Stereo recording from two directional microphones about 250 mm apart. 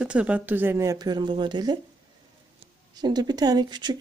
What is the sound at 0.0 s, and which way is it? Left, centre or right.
Speech, centre.